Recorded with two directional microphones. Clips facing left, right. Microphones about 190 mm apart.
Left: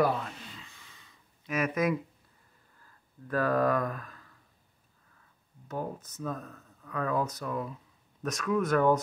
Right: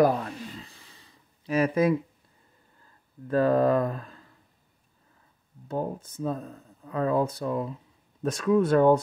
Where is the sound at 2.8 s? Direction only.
25° right (ahead or behind).